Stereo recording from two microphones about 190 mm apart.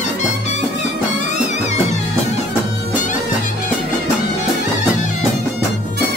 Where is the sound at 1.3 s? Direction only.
35° left (ahead or behind).